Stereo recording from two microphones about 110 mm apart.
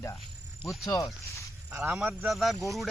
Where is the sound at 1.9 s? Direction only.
5° right (ahead or behind).